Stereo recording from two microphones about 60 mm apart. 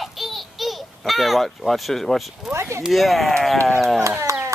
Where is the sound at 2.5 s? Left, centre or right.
Right.